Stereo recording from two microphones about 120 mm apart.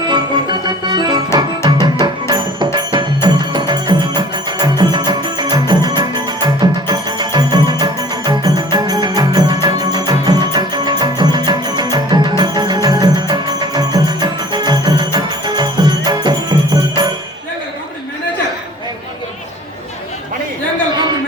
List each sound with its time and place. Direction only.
0.1 s music: 35° right (ahead or behind)